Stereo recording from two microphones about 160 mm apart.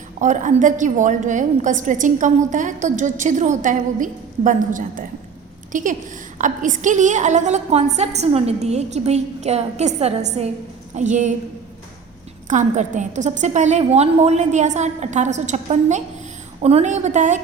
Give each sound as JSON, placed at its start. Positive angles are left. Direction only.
{"t": 0.2, "sound": "a woman's voice", "side_deg": -50}
{"t": 12.5, "sound": "a woman's voice", "side_deg": -50}